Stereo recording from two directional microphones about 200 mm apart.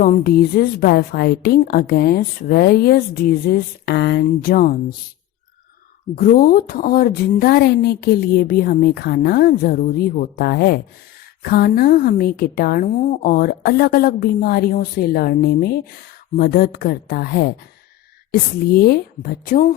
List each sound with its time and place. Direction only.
0.0 s a woman's voice: 45° left (ahead or behind)
6.1 s a woman's voice: 45° left (ahead or behind)